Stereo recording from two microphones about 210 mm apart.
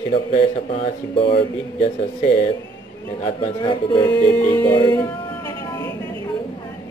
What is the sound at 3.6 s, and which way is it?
Speech, 20° left (ahead or behind).